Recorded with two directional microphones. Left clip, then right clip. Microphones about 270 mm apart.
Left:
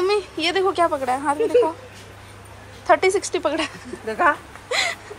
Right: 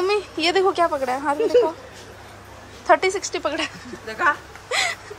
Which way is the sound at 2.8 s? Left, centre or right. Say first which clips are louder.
Left 1 dB; centre.